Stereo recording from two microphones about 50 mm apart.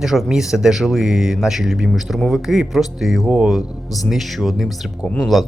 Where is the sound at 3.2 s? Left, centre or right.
Centre.